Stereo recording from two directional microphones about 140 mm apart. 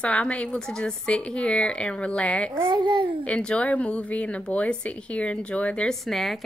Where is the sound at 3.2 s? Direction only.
5° left (ahead or behind).